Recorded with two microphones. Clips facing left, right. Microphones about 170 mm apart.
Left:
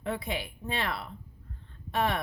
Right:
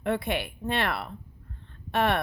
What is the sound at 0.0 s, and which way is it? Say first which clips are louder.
Speech: right 5 dB; 65° right (ahead or behind).